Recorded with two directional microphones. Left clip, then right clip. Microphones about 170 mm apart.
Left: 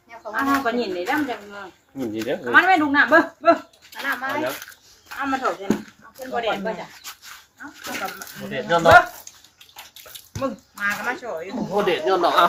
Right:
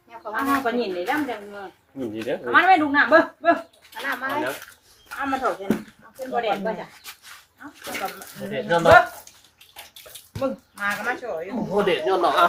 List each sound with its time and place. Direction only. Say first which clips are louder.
0.3 s speech: left 1 dB; centre (ahead or behind)
2.0 s speech: left 2 dB; 45° left (ahead or behind)
2.5 s speech: left 1 dB; centre (ahead or behind)
5.1 s speech: left 1 dB; 10° left (ahead or behind)
6.3 s speech: even; centre (ahead or behind)
8.5 s speech: left 1 dB; 25° left (ahead or behind)
10.4 s speech: left 1 dB; 5° left (ahead or behind)
11.5 s speech: even; 20° left (ahead or behind)